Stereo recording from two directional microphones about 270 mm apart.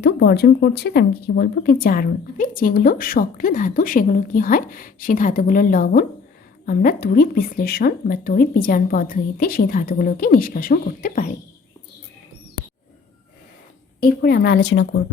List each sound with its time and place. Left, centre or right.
0.0 s speech: left
14.0 s speech: left